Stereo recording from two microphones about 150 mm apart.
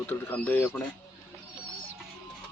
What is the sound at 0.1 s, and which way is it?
Speech, 10° left (ahead or behind).